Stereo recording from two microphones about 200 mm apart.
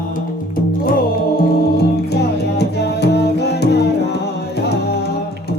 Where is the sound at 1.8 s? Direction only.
55° left (ahead or behind).